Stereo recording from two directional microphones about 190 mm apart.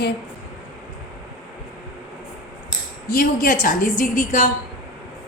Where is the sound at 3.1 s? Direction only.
45° left (ahead or behind).